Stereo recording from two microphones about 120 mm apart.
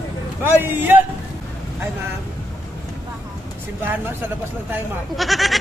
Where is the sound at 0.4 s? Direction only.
15° right (ahead or behind).